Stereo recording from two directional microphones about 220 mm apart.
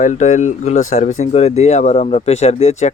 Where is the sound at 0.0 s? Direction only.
35° left (ahead or behind).